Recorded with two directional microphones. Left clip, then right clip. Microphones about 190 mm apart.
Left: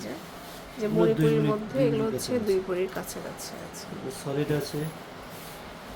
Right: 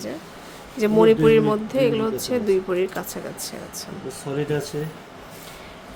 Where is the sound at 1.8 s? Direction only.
30° right (ahead or behind).